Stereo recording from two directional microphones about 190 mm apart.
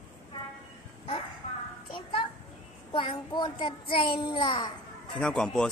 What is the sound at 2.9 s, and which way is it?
Child singing, 25° left (ahead or behind).